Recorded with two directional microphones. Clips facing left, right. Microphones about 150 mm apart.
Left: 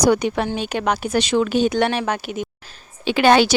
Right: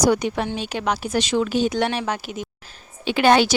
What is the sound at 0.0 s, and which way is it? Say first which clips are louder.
Speech: left 2 dB; 65° left (ahead or behind).